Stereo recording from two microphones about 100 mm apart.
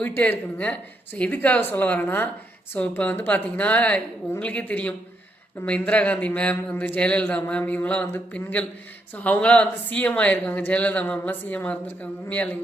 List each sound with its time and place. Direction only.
0.0 s speech: 15° left (ahead or behind)